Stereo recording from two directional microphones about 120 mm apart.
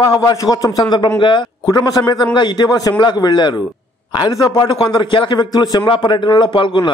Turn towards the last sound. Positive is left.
turn(degrees=40)  # may be behind; listen again after turning